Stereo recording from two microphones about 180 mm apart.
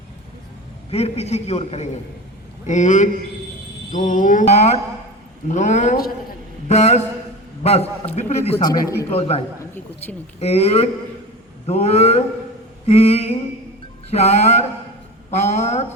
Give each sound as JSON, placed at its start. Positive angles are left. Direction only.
{"t": 0.9, "sound": "a man's voice", "side_deg": 35}
{"t": 2.6, "sound": "a sound", "side_deg": 45}
{"t": 5.5, "sound": "a man's voice", "side_deg": 40}
{"t": 8.7, "sound": "a man's voice", "side_deg": 20}
{"t": 9.0, "sound": "a man's voice", "side_deg": 35}
{"t": 10.4, "sound": "a man's voice", "side_deg": 35}